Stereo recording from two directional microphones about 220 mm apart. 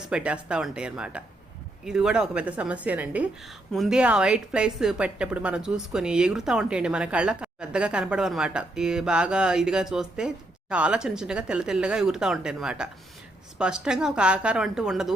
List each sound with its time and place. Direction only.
0.1 s a woman's voice: 5° right (ahead or behind)